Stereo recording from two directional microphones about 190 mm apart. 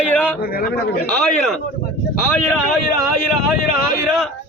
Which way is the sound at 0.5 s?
50° left (ahead or behind).